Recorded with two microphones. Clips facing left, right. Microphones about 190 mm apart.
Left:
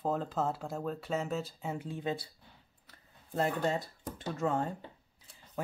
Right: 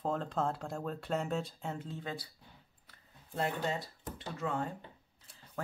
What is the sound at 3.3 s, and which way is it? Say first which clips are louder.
Speech: left 4 dB; 45° left (ahead or behind).